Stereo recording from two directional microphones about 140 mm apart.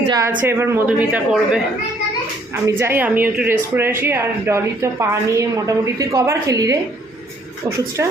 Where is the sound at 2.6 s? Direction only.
15° right (ahead or behind).